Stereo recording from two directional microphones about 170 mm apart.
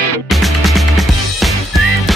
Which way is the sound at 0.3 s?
Centre (ahead or behind).